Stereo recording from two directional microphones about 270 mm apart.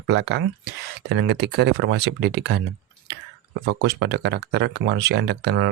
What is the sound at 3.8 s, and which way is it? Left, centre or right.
Speech, right.